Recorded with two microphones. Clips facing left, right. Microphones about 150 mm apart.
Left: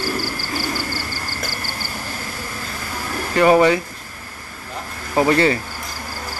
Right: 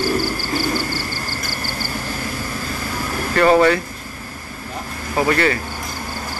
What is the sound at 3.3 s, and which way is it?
Speech, 15° left (ahead or behind).